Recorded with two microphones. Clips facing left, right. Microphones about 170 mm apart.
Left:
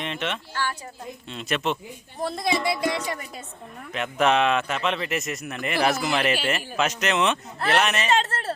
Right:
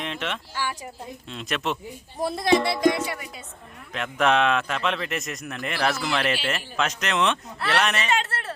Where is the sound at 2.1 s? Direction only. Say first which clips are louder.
Right 2 dB; 10° right (ahead or behind).